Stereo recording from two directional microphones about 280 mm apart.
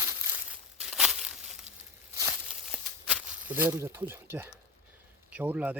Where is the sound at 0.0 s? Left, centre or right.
Centre.